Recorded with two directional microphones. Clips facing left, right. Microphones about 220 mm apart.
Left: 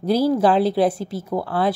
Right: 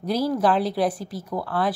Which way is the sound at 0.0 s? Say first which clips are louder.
Left 5 dB; 30° left (ahead or behind).